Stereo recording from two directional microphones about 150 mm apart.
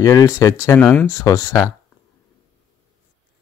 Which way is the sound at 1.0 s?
25° left (ahead or behind).